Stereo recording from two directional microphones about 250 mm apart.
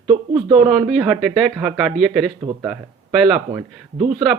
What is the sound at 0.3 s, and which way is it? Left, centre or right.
Speech, right.